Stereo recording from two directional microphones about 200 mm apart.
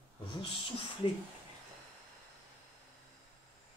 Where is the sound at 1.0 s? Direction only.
25° left (ahead or behind).